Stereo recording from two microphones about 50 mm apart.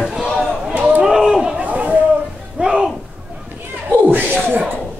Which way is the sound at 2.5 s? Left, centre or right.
Centre.